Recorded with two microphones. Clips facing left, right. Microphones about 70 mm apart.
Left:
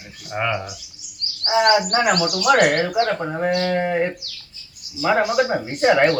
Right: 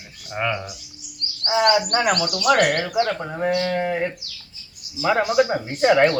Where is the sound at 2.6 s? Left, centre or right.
Left.